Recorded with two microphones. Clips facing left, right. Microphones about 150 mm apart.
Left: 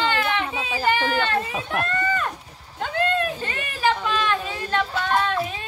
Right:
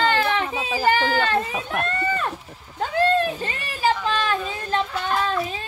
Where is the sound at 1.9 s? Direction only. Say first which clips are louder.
Even; 35° right (ahead or behind).